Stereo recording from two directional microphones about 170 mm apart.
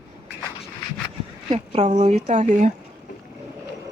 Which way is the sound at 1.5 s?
40° right (ahead or behind).